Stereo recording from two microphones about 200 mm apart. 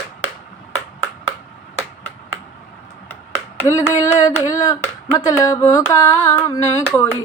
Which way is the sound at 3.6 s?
15° left (ahead or behind).